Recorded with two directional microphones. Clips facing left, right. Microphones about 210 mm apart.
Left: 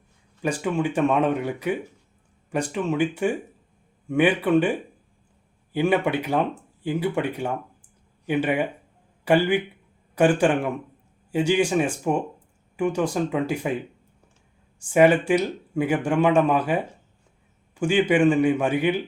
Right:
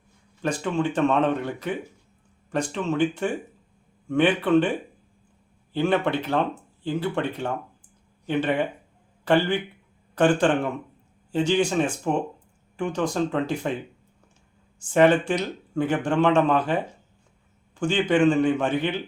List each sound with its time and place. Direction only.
0.4 s speech: 10° left (ahead or behind)
5.7 s speech: 10° left (ahead or behind)
14.8 s speech: 10° left (ahead or behind)